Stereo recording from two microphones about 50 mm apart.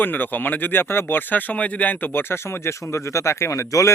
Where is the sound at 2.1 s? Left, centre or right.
Left.